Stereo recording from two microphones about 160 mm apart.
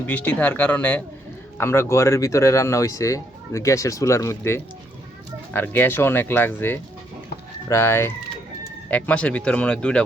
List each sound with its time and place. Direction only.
0.0 s speech: 10° left (ahead or behind)